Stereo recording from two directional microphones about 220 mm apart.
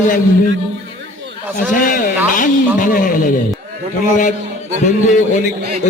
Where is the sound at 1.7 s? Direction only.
40° left (ahead or behind).